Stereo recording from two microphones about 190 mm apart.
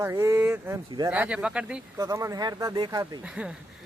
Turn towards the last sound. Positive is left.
turn(degrees=-5)  # may be behind; listen again after turning